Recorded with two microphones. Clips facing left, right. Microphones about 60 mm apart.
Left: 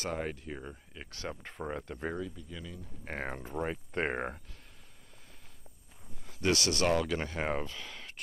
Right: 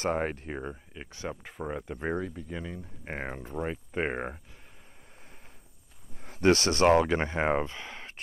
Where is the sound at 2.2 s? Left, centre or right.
Right.